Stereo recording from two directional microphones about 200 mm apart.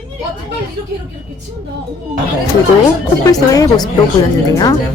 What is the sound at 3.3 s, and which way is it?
A woman's voice, 20° left (ahead or behind).